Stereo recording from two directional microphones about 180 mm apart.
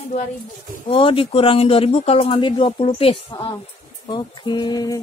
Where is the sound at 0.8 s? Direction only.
30° left (ahead or behind).